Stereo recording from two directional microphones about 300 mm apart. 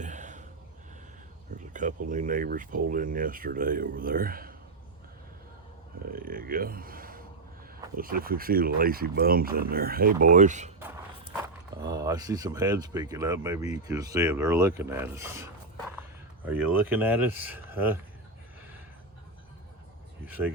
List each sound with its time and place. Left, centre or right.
0.0 s a sound: right
1.5 s speech: right
6.1 s speech: right
11.8 s speech: centre
16.5 s speech: centre
20.2 s speech: centre